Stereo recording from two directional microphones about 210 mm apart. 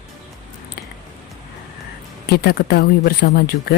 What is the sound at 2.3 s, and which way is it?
Speech, 50° left (ahead or behind).